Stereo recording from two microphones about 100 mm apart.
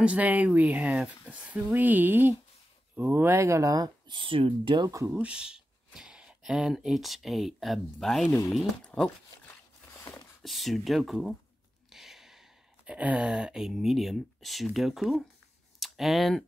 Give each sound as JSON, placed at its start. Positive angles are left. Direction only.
{"t": 0.0, "sound": "speech", "side_deg": -15}
{"t": 4.1, "sound": "speech", "side_deg": -60}
{"t": 4.8, "sound": "speech", "side_deg": -30}
{"t": 5.1, "sound": "speech", "side_deg": -10}
{"t": 9.9, "sound": "a sound", "side_deg": 30}
{"t": 10.4, "sound": "speech", "side_deg": 0}